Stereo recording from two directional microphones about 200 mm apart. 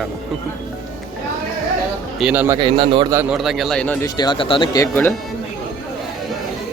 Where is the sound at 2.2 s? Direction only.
5° right (ahead or behind); by 3.0 s 25° right (ahead or behind).